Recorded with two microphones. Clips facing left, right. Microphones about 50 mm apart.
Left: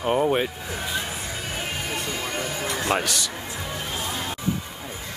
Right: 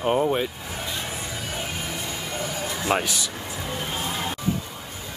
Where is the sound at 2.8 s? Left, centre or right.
Centre.